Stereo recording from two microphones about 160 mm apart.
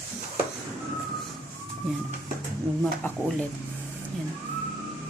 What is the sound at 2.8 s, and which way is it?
Speech, 10° left (ahead or behind).